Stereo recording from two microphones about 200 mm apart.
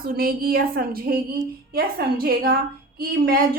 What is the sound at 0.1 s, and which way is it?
A woman's voice, 50° right (ahead or behind).